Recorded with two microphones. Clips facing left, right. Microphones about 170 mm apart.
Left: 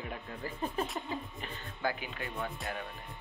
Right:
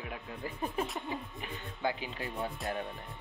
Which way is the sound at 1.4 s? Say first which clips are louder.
Right 2 dB; 20° right (ahead or behind).